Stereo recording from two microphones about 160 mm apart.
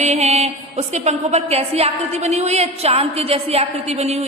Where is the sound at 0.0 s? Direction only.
45° right (ahead or behind).